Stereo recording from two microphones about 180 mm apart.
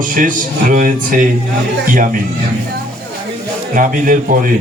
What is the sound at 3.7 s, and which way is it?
Speech, 50° right (ahead or behind).